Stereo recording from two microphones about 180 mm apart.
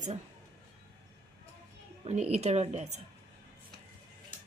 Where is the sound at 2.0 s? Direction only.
35° right (ahead or behind).